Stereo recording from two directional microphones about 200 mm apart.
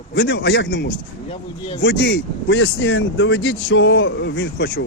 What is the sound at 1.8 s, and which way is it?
Speech, 60° left (ahead or behind).